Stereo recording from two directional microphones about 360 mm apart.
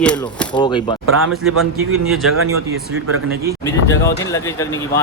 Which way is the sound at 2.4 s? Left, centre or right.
Right.